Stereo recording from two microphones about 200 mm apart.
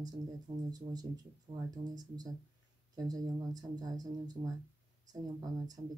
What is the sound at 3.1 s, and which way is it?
Speech, 20° right (ahead or behind).